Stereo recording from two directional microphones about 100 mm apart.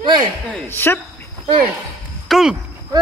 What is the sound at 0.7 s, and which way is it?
Speech, 20° left (ahead or behind).